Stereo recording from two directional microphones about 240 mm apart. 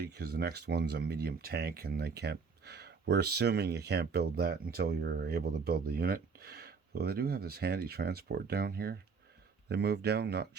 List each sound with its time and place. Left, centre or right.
0.0 s speech: right